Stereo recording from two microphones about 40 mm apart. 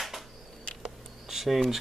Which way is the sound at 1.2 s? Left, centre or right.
Centre.